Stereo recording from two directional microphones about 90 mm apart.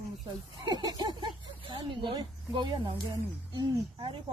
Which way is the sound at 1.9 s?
60° right (ahead or behind).